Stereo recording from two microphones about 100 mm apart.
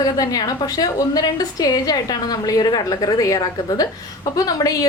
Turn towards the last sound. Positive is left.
turn(degrees=35)  # may be behind; listen again after turning